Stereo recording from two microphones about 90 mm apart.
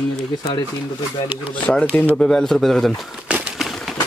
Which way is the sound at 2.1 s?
5° left (ahead or behind).